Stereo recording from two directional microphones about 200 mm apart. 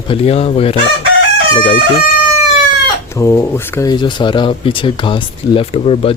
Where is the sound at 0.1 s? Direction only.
30° left (ahead or behind).